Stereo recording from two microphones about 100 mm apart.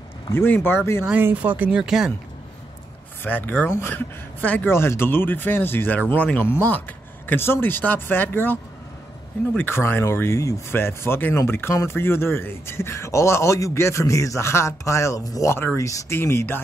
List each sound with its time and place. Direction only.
0.3 s speech: 20° left (ahead or behind)
1.2 s speech: 15° right (ahead or behind)
1.8 s speech: 5° right (ahead or behind)
3.3 s speech: 20° left (ahead or behind); by 15.5 s 35° left (ahead or behind)
15.5 s speech: 25° left (ahead or behind)